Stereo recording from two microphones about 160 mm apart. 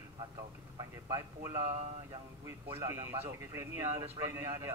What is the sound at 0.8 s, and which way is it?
A man's voice, 20° right (ahead or behind).